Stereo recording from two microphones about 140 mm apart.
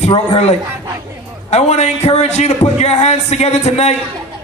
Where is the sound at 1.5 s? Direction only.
50° left (ahead or behind).